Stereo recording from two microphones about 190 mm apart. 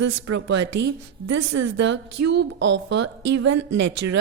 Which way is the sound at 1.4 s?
80° right.